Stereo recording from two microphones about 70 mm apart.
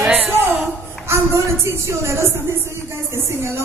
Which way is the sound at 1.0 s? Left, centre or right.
Right.